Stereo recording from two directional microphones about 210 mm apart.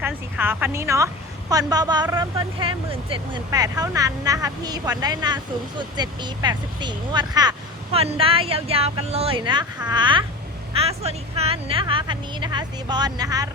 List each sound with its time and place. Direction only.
0.0 s a woman's voice: 10° right (ahead or behind)